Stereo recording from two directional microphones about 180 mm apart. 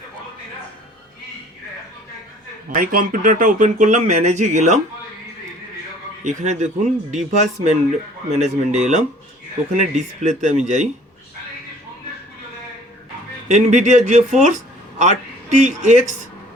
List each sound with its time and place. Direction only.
2.7 s speech: 50° right (ahead or behind)
6.2 s speech: 40° right (ahead or behind)
13.5 s speech: 40° right (ahead or behind)